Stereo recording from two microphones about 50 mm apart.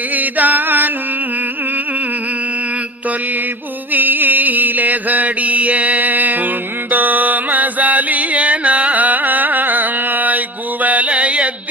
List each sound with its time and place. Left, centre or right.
0.1 s mantra: right
3.9 s mantra: right